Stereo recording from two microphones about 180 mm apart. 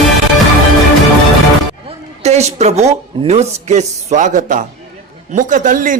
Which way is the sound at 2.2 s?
35° right (ahead or behind).